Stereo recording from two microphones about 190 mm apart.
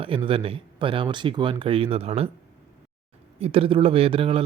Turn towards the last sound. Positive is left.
turn(degrees=-30)  # may be behind; listen again after turning